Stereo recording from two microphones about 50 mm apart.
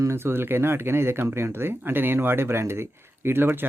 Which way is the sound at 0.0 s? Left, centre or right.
Right.